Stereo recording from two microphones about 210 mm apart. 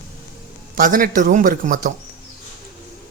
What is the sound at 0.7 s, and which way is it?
Speech, 40° right (ahead or behind).